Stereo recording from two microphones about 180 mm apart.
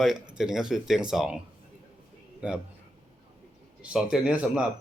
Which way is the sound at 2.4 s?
5° right (ahead or behind).